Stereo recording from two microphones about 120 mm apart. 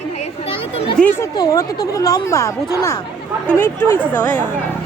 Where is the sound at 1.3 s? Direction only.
35° left (ahead or behind); by 4.5 s 15° left (ahead or behind).